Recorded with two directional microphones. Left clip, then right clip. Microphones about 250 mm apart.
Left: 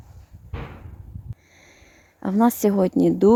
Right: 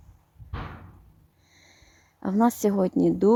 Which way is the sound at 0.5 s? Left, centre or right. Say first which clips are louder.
Left 1 dB; right.